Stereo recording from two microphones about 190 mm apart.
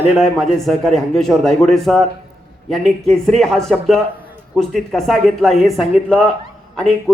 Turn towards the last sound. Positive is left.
turn(degrees=5)  # may be behind; listen again after turning